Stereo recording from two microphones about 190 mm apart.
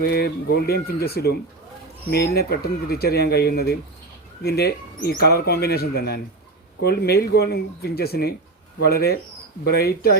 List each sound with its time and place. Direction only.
0.0 s speech: 55° left (ahead or behind)